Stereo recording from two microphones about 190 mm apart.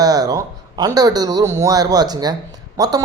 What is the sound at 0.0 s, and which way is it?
A man's voice, 20° right (ahead or behind).